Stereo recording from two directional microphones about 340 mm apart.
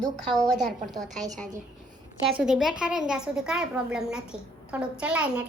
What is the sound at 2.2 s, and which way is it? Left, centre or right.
A woman's voice, centre.